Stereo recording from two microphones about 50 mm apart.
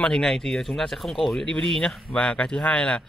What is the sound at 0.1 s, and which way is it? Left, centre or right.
Speech, centre.